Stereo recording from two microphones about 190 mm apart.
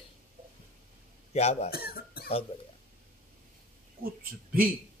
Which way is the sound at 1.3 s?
35° left (ahead or behind).